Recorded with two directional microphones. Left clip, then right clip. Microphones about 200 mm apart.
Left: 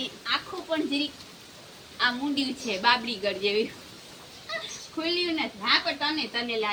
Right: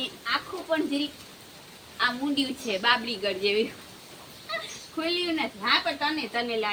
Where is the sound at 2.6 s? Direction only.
20° left (ahead or behind).